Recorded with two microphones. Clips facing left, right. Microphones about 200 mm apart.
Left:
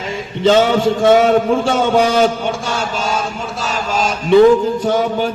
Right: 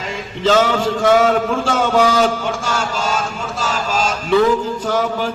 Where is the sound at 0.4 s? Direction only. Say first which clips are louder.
Left 3 dB; 20° left (ahead or behind).